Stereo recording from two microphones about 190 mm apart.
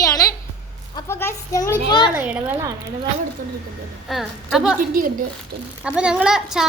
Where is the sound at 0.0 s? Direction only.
20° left (ahead or behind).